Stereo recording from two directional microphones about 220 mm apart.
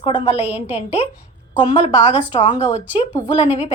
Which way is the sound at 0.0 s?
25° left (ahead or behind).